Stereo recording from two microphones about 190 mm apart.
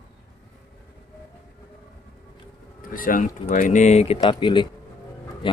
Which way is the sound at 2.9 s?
45° left (ahead or behind).